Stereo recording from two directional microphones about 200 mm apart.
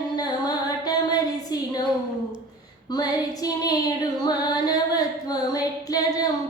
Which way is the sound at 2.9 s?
20° left (ahead or behind).